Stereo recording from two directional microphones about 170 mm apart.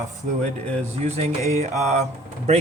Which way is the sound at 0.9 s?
40° right (ahead or behind).